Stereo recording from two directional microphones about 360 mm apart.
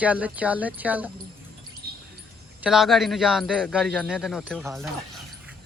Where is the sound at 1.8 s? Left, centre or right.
Right.